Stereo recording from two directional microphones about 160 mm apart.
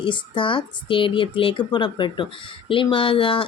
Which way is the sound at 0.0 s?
30° left (ahead or behind).